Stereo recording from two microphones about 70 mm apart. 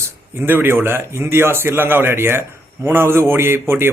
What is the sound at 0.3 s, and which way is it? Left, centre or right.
Speech, right.